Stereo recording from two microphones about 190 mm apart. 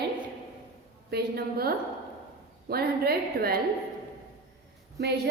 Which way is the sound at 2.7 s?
55° right (ahead or behind).